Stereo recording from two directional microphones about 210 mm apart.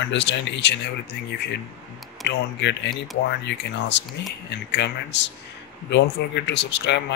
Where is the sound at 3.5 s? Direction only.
60° left (ahead or behind).